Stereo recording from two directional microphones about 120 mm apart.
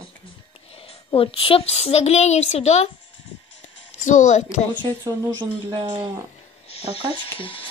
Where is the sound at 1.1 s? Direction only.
50° left (ahead or behind); by 2.8 s 65° left (ahead or behind).